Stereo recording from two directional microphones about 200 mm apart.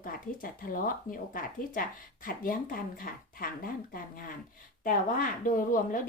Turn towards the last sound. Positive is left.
turn(degrees=45)  # may be behind; listen again after turning